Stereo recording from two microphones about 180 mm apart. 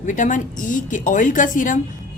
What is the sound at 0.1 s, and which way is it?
Speech, 45° left (ahead or behind).